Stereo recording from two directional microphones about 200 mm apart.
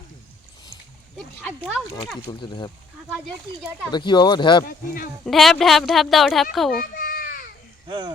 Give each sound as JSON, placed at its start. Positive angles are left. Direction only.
{"t": 1.1, "sound": "speech", "side_deg": 5}
{"t": 1.6, "sound": "speech", "side_deg": -5}
{"t": 2.4, "sound": "speech", "side_deg": 20}
{"t": 3.9, "sound": "speech", "side_deg": 20}
{"t": 5.2, "sound": "speech", "side_deg": 0}
{"t": 6.7, "sound": "children playing", "side_deg": 45}
{"t": 7.9, "sound": "speech", "side_deg": -20}